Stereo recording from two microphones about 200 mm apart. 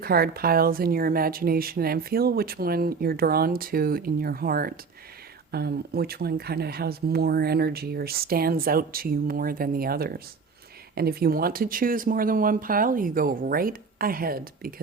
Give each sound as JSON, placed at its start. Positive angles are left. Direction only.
{"t": 0.0, "sound": "speech", "side_deg": -50}